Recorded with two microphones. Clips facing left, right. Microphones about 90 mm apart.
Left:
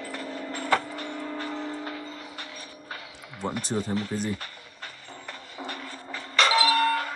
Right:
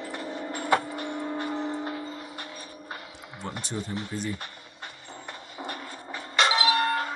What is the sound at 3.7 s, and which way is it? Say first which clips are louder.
Speech: left 5 dB; 40° left (ahead or behind).